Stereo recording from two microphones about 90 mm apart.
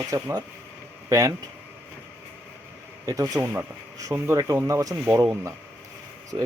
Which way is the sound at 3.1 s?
40° right (ahead or behind).